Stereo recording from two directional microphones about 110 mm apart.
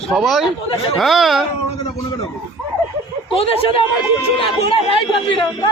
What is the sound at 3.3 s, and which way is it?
A man's voice, 60° left (ahead or behind).